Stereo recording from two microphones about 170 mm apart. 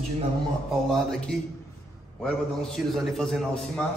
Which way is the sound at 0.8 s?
5° left (ahead or behind).